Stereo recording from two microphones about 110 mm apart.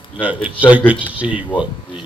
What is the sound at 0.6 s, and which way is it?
Speech, 15° right (ahead or behind).